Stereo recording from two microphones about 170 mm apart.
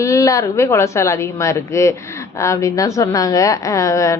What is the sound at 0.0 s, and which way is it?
A woman's voice, 20° left (ahead or behind).